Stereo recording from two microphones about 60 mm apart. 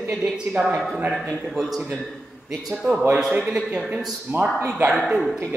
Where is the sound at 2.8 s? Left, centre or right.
Centre.